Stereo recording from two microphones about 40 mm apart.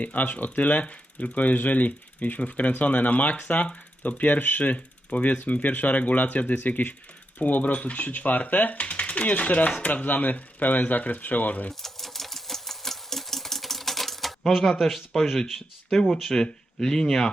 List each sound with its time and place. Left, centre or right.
0.0 s speech: left
11.7 s typewriter: centre
14.8 s speech: centre
16.4 s speech: centre